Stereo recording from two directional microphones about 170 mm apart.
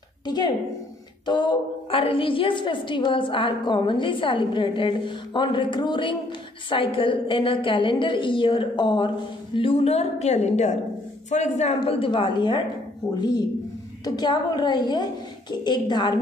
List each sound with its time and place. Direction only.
1.2 s a woman's voice: 25° left (ahead or behind)
14.0 s a woman's voice: 25° left (ahead or behind)